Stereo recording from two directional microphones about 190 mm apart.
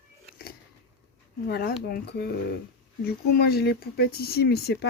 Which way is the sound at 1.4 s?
50° left (ahead or behind).